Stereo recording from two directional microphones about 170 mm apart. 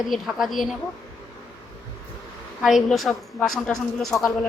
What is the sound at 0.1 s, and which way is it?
Speech, centre (ahead or behind).